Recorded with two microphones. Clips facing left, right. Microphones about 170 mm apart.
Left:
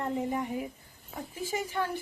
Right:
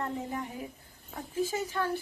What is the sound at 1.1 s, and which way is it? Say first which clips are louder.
Speech: right 2 dB; 5° left (ahead or behind).